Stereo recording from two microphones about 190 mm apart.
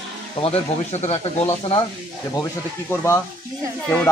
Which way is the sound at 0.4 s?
35° left (ahead or behind).